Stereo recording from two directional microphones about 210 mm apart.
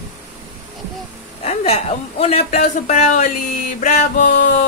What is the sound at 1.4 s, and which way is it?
A man's voice, 30° left (ahead or behind).